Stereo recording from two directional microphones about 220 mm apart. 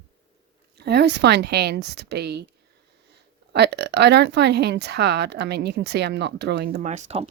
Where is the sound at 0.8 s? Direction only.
50° right (ahead or behind).